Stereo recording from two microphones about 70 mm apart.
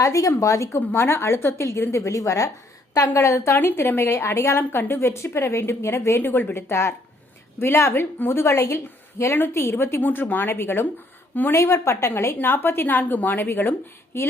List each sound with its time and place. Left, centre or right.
0.0 s speech: left
0.8 s a woman's voice: left
10.0 s a woman's voice: left
12.4 s a woman's voice: left